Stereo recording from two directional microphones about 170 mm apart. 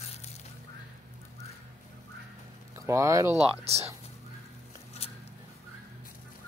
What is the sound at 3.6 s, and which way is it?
Speech, 35° right (ahead or behind).